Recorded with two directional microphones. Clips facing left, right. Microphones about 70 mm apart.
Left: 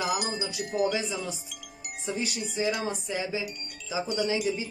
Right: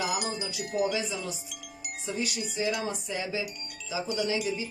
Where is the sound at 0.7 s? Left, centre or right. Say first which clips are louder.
Left 1 dB; left.